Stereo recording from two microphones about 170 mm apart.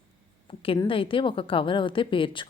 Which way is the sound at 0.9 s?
30° left (ahead or behind).